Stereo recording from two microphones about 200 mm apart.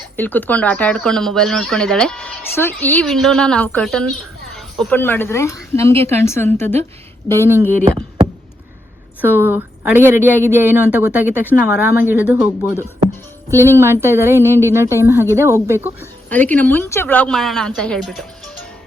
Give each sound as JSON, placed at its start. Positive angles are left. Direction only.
{"t": 0.2, "sound": "speech", "side_deg": 10}
{"t": 5.9, "sound": "a woman's voice", "side_deg": -30}
{"t": 6.1, "sound": "a woman's voice", "side_deg": 10}
{"t": 7.3, "sound": "a woman's voice", "side_deg": -10}
{"t": 9.2, "sound": "a woman's voice", "side_deg": -10}
{"t": 16.3, "sound": "speech", "side_deg": 10}